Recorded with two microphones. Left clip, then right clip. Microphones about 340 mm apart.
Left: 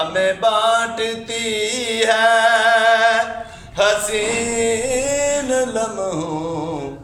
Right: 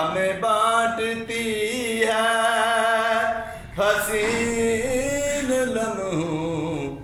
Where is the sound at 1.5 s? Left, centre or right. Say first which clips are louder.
Left 5 dB; left.